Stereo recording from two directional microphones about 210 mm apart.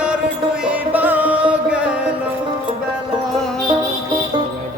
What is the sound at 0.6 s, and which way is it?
Music, 5° right (ahead or behind).